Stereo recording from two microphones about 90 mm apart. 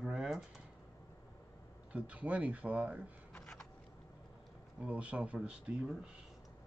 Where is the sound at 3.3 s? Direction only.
10° left (ahead or behind).